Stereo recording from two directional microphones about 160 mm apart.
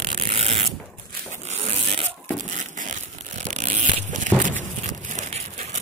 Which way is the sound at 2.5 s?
50° right (ahead or behind).